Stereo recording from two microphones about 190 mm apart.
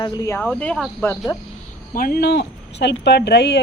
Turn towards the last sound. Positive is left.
turn(degrees=60)  # may be behind; listen again after turning